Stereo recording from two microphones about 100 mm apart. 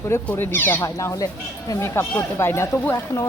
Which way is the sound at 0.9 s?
35° left (ahead or behind).